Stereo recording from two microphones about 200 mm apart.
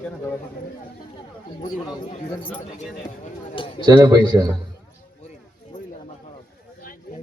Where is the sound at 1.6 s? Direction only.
20° left (ahead or behind).